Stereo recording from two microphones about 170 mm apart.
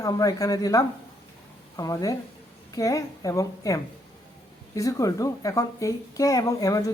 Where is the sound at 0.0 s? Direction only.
20° left (ahead or behind).